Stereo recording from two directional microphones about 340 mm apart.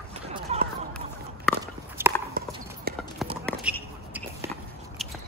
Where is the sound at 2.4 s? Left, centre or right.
Right.